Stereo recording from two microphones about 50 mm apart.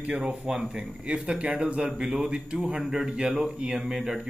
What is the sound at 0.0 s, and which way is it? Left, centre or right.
Speech, centre.